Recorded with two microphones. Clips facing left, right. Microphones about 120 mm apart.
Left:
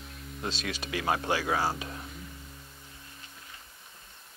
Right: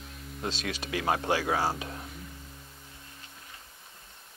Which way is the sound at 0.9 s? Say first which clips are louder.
Right 1 dB; 35° right (ahead or behind).